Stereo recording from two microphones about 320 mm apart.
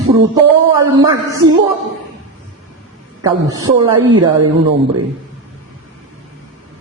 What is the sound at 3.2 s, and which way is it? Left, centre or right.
A woman's voice, centre.